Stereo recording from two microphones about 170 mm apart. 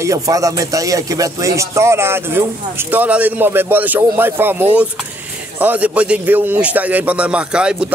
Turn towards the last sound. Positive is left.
turn(degrees=-5)  # may be behind; listen again after turning